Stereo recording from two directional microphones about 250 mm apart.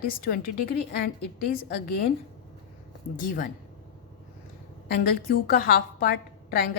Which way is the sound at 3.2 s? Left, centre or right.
Left.